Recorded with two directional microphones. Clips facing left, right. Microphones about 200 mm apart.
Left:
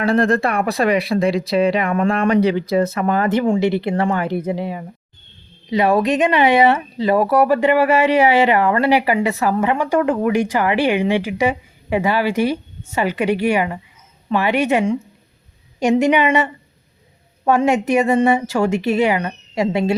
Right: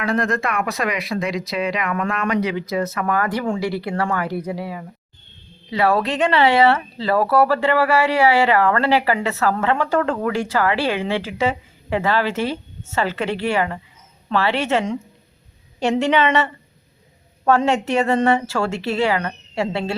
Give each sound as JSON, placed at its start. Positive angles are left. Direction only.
{"t": 0.0, "sound": "speech", "side_deg": 30}